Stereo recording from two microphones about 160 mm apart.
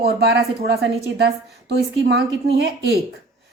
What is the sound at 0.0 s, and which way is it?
Speech, 90° right.